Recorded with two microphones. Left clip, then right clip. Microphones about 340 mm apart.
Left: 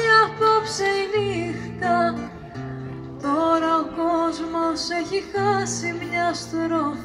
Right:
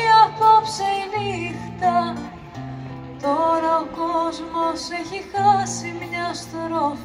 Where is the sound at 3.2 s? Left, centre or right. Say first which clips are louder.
Right 1 dB; centre.